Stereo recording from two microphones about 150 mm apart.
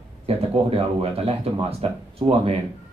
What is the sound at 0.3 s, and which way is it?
Speech, 40° right (ahead or behind).